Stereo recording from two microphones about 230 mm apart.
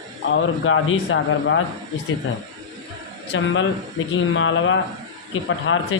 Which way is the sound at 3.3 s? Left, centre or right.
Left.